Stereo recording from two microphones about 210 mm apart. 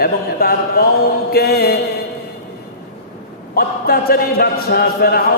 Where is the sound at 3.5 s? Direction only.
45° left (ahead or behind).